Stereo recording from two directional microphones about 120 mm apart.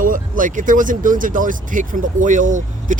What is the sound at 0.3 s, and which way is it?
Speech, 90° right.